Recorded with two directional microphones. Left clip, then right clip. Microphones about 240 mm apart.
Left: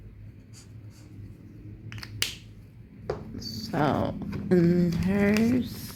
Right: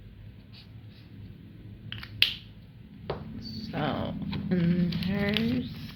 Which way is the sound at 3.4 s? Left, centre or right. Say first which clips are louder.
Left 9 dB; left.